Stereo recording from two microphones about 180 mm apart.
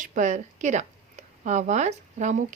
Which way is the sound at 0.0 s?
45° right (ahead or behind).